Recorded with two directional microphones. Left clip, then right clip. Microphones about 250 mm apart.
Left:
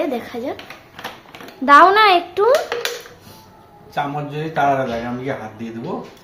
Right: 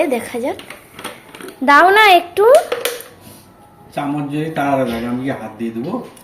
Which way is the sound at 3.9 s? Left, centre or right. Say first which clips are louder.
Right 2 dB; left.